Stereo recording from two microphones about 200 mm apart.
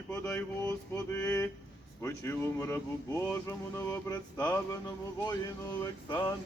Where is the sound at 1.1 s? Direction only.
15° left (ahead or behind).